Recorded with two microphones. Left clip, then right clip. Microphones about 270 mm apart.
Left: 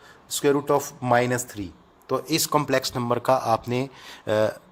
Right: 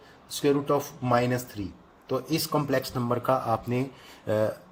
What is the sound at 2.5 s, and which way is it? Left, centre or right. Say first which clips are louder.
Speech: left 4 dB; left.